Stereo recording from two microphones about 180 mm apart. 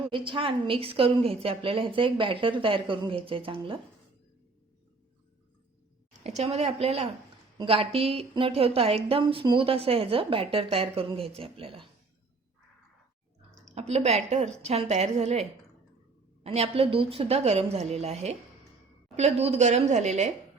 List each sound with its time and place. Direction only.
0.1 s a woman's voice: 30° right (ahead or behind)
6.2 s speech: 35° right (ahead or behind)
13.7 s speech: 35° right (ahead or behind)